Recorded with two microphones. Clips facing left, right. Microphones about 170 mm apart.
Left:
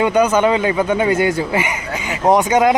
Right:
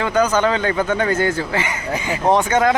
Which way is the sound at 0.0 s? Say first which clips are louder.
Left 3 dB; 15° left (ahead or behind).